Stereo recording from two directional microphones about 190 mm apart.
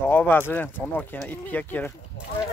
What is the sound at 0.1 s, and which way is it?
Speech, 10° left (ahead or behind).